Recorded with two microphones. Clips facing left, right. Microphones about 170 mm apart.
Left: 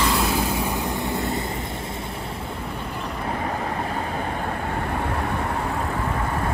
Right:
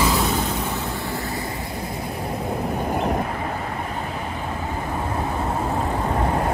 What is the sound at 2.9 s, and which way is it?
Vehicle, 50° right (ahead or behind).